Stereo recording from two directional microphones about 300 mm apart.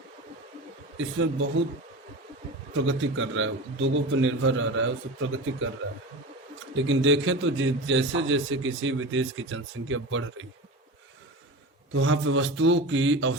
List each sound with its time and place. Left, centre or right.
0.9 s a man's voice: right
2.7 s a man's voice: right
6.7 s a man's voice: right
11.9 s a man's voice: right